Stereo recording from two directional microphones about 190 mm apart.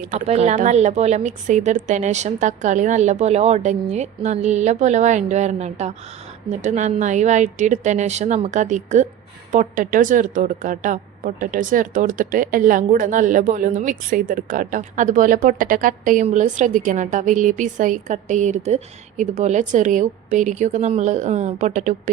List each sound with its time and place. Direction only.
0.1 s a woman's voice: 35° right (ahead or behind)